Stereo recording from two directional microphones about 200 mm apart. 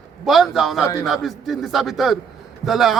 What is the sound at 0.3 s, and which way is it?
A man's voice, centre (ahead or behind).